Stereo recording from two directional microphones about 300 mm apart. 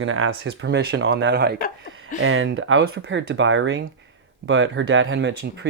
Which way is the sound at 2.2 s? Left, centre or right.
Right.